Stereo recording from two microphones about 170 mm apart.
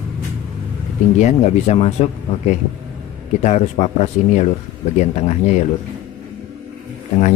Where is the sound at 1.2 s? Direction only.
40° left (ahead or behind).